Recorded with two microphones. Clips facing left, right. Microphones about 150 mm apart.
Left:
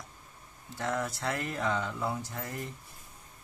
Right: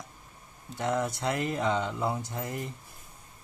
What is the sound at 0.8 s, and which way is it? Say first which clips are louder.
Speech: right 4 dB; 20° right (ahead or behind).